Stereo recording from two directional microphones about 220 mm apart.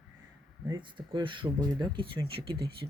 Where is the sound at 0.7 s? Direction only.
20° right (ahead or behind).